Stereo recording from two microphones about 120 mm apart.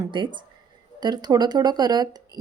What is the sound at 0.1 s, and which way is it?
A woman's voice, 40° right (ahead or behind).